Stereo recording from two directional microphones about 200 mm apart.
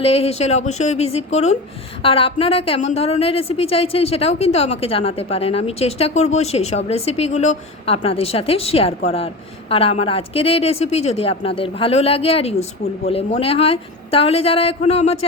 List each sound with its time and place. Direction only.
0.0 s a woman's voice: 30° left (ahead or behind)